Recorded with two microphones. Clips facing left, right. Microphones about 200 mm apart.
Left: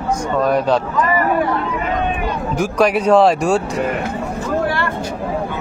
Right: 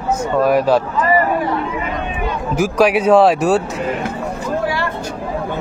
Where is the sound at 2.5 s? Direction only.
5° right (ahead or behind).